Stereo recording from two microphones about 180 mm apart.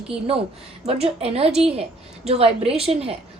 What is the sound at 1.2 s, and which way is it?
A woman's voice, 35° right (ahead or behind).